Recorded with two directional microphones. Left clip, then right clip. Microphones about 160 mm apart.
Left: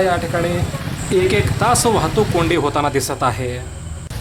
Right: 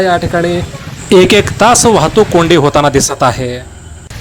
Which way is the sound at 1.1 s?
50° right (ahead or behind).